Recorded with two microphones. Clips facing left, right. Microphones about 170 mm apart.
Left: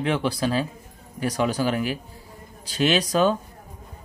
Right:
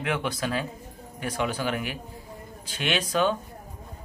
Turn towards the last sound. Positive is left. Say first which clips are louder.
# left 5 dB
turn(degrees=40)  # may be behind; listen again after turning